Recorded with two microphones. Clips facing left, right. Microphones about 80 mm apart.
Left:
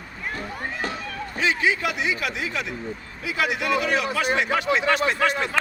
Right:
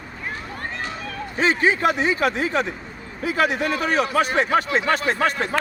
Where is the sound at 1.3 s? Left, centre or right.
Right.